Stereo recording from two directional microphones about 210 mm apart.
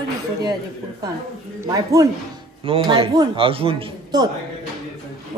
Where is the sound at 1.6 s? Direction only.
15° right (ahead or behind).